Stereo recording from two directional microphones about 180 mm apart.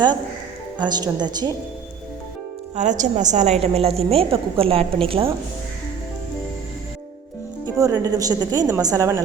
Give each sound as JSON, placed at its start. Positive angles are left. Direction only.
{"t": 0.8, "sound": "a woman's voice", "side_deg": -25}
{"t": 2.7, "sound": "a woman's voice", "side_deg": -40}
{"t": 7.8, "sound": "a woman's voice", "side_deg": -20}